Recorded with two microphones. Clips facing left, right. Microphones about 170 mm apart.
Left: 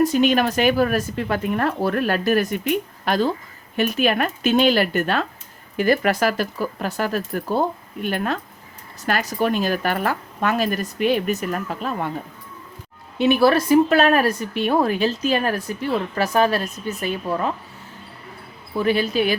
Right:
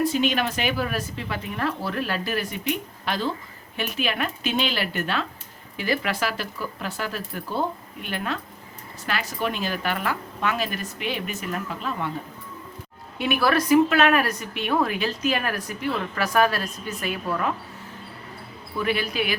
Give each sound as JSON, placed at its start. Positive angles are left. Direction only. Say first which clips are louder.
{"t": 0.0, "sound": "speech", "louder": "left 6 dB", "side_deg": 45}
{"t": 13.1, "sound": "a woman's voice", "louder": "left 6 dB", "side_deg": 25}
{"t": 18.8, "sound": "a woman's voice", "louder": "left 6 dB", "side_deg": 30}